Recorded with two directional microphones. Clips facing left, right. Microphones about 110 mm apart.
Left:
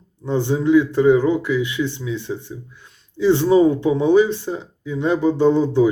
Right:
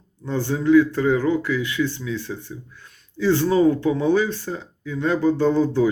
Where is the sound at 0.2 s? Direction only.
20° left (ahead or behind).